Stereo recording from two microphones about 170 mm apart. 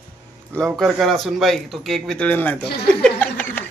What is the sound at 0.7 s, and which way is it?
Speech, centre (ahead or behind).